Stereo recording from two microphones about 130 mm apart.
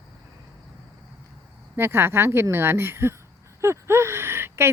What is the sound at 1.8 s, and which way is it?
Speech, 20° right (ahead or behind).